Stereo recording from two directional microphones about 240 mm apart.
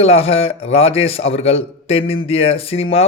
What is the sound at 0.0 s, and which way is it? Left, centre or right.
A man's voice, left.